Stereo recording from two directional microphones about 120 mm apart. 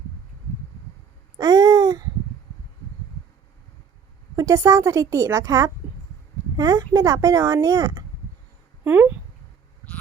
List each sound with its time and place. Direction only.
1.4 s a sound: 30° right (ahead or behind)
4.4 s a woman's voice: 25° right (ahead or behind)
8.8 s speech: 15° right (ahead or behind)